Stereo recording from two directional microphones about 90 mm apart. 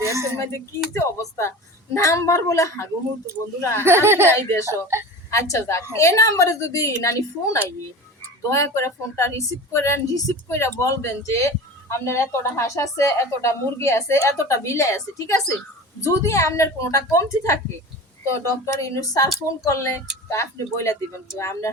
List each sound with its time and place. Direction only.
0.0 s a sound: 30° right (ahead or behind)
0.9 s speech: 30° left (ahead or behind)
3.8 s speech: 30° right (ahead or behind)
4.3 s speech: 35° left (ahead or behind)
4.6 s speech: 30° right (ahead or behind)
5.3 s speech: 35° left (ahead or behind)